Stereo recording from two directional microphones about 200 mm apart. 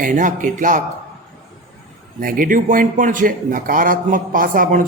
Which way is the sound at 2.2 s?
45° right (ahead or behind).